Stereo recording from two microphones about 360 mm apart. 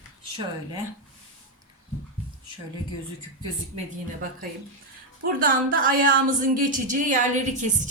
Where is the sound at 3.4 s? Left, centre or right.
Centre.